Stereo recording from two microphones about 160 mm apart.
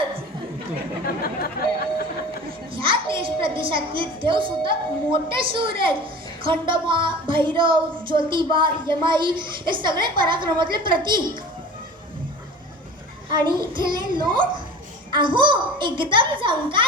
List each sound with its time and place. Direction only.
1.0 s chatter: 70° left (ahead or behind)
2.7 s a child's voice: 35° right (ahead or behind)
13.4 s a woman's voice: 30° right (ahead or behind)